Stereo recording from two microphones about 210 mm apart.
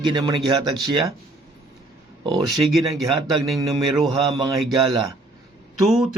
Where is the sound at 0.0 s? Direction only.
20° right (ahead or behind).